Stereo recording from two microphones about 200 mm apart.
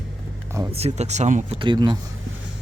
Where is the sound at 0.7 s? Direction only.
30° right (ahead or behind).